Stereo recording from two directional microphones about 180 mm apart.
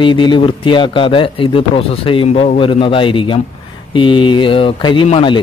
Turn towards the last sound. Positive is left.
turn(degrees=30)  # may be behind; listen again after turning